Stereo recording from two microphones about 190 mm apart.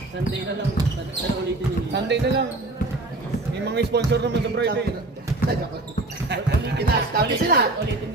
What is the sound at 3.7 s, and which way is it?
Speech, 60° right (ahead or behind).